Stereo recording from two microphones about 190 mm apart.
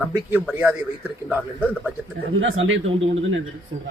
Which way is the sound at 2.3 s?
90° right.